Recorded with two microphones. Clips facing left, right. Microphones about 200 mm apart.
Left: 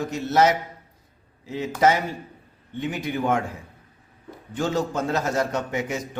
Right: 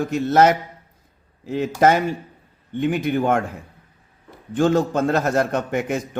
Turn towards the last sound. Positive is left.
turn(degrees=-55)  # may be behind; listen again after turning